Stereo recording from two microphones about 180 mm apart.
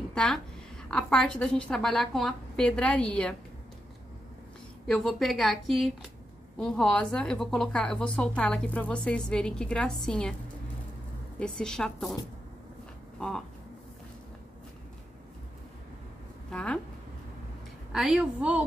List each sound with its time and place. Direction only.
0.1 s a woman's voice: 5° left (ahead or behind)
4.8 s a woman's voice: centre (ahead or behind)
11.3 s a woman's voice: 5° left (ahead or behind)
13.2 s a woman's voice: 5° left (ahead or behind)
16.4 s speech: 5° left (ahead or behind)
17.9 s a woman's voice: 5° right (ahead or behind)